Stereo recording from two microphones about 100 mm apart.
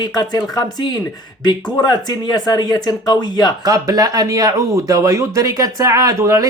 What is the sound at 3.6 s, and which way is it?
Speech, 40° right (ahead or behind).